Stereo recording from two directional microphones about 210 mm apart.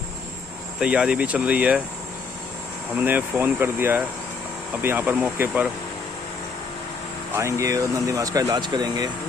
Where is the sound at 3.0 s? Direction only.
10° right (ahead or behind).